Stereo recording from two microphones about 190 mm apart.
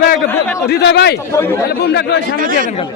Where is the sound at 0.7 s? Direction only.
60° left (ahead or behind).